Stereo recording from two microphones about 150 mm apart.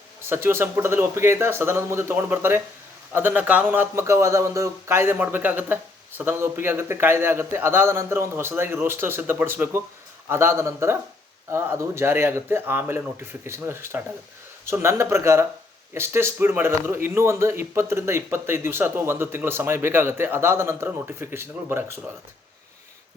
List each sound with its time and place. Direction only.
0.3 s a man's voice: 15° right (ahead or behind)